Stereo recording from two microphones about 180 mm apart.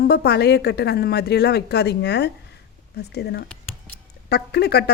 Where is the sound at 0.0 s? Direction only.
60° left (ahead or behind).